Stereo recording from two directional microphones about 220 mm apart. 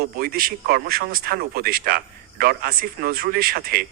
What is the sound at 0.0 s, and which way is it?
A man's voice, 45° right (ahead or behind).